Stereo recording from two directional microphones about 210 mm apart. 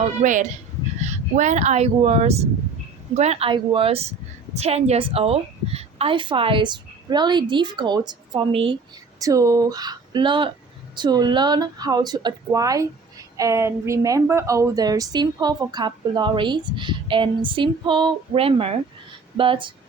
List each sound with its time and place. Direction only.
0.0 s a woman's voice: 35° right (ahead or behind)